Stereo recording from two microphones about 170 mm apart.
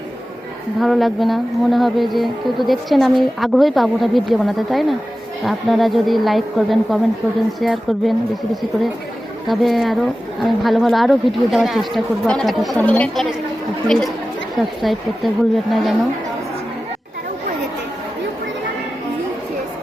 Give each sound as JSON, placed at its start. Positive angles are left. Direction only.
{"t": 0.8, "sound": "speech", "side_deg": 0}
{"t": 9.5, "sound": "speech", "side_deg": 0}